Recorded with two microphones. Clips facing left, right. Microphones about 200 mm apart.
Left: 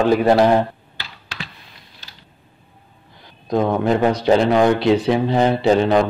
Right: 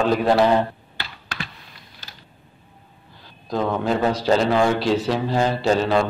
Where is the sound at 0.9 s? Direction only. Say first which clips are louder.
Right 1 dB; 50° right (ahead or behind).